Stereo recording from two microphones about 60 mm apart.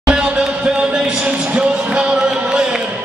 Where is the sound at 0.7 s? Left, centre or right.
Centre.